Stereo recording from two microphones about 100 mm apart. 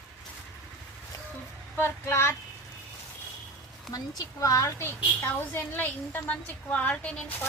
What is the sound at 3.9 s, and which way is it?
A woman's voice, 35° left (ahead or behind).